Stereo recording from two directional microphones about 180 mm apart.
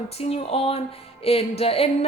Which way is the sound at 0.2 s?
35° left (ahead or behind).